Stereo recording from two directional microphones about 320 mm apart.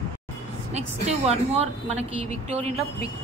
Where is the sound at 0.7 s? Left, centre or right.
Centre.